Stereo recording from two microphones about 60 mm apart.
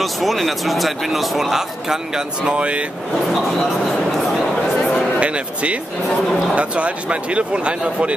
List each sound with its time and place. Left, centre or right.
0.0 s speech: centre
3.3 s speech: centre
5.2 s speech: centre